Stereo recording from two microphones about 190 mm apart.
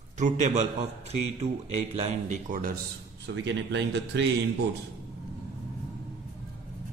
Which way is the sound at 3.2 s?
70° right (ahead or behind).